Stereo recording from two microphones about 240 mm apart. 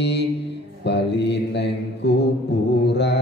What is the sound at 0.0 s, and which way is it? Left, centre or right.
Mantra, left.